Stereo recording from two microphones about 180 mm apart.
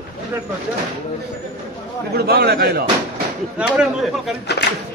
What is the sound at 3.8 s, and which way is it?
Speech, centre (ahead or behind).